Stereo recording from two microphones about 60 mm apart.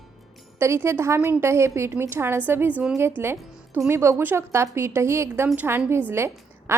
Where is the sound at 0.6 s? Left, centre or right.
Right.